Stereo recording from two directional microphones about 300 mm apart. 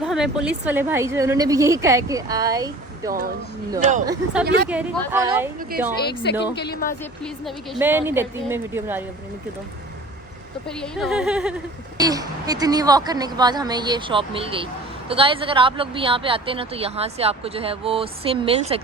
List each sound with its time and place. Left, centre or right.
0.0 s speech: centre
3.1 s speech: right
5.1 s speech: centre
6.4 s a woman's voice: left
7.0 s speech: centre
10.7 s a woman's voice: centre